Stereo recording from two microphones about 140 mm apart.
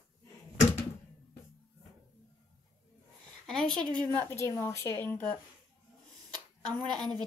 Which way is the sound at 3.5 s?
5° left (ahead or behind).